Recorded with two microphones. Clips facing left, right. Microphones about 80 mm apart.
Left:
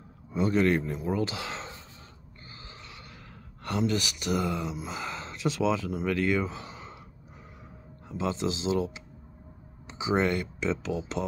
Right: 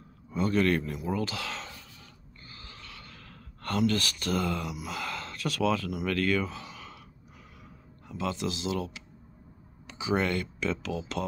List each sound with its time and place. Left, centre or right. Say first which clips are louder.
0.3 s speech: left 1 dB; centre
2.5 s a sound: left 1 dB; left
3.6 s speech: right 1 dB; centre
8.1 s speech: left 2 dB; left